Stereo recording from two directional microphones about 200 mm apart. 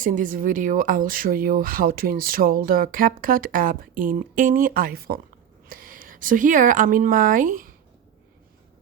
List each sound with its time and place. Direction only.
0.0 s speech: 40° right (ahead or behind)